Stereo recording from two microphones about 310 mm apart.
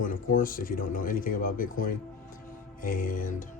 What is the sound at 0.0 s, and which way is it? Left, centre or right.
Speech, left.